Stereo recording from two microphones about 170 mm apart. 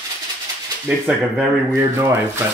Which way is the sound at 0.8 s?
10° right (ahead or behind).